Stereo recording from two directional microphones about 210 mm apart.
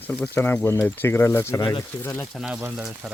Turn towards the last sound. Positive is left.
turn(degrees=-5)  # may be behind; listen again after turning